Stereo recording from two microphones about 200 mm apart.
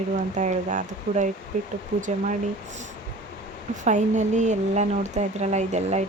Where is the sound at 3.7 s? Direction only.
40° right (ahead or behind).